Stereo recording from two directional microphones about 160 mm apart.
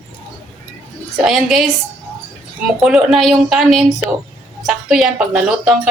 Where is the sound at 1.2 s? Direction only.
5° right (ahead or behind).